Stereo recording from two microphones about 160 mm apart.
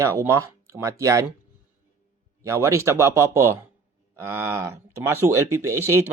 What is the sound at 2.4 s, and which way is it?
Speech, 20° right (ahead or behind).